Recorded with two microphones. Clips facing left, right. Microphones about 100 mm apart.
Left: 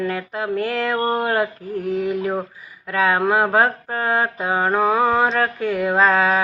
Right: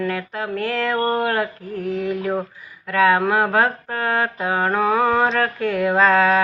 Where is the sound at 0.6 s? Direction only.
15° left (ahead or behind).